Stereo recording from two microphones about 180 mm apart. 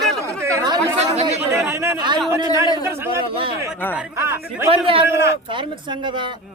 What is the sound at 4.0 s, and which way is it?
A man's voice, 15° right (ahead or behind).